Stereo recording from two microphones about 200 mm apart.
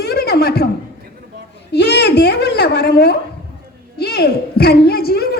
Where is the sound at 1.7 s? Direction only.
55° left (ahead or behind).